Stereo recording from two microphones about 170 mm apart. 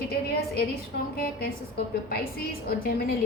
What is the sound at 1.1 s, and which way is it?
Speech, 60° left (ahead or behind).